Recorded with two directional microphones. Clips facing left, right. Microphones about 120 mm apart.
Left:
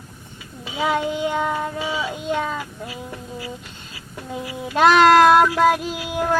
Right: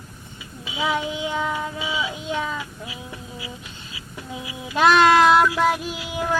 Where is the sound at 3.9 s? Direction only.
45° left (ahead or behind).